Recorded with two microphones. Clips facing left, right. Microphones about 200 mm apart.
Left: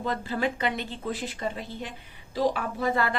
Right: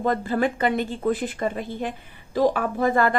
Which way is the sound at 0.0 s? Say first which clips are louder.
Right 6 dB; 50° right (ahead or behind).